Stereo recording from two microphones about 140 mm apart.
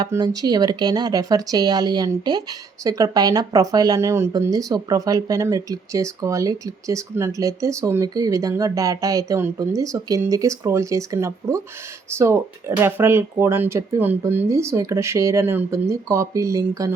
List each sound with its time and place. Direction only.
0.1 s speech: 30° right (ahead or behind)